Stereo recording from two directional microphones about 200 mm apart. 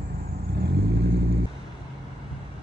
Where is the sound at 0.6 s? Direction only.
55° right (ahead or behind).